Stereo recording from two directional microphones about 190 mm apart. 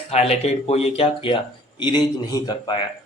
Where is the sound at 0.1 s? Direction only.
35° left (ahead or behind).